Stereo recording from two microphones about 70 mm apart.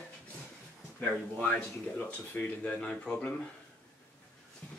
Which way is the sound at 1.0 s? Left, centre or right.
Left.